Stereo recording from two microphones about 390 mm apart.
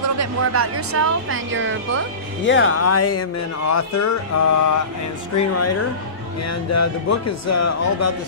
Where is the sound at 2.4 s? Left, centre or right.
Left.